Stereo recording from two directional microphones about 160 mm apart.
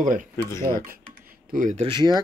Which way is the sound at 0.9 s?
65° right (ahead or behind).